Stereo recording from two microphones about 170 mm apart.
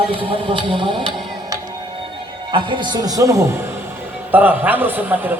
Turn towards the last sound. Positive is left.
turn(degrees=-10)  # may be behind; listen again after turning